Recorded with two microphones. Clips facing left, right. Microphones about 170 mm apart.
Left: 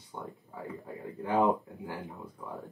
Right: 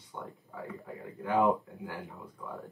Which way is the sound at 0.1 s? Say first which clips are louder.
Left 1 dB; 25° left (ahead or behind).